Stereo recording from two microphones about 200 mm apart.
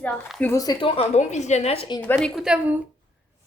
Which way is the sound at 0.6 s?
25° left (ahead or behind).